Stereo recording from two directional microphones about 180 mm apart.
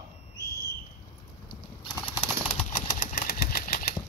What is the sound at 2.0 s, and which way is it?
Bird flight, 10° right (ahead or behind).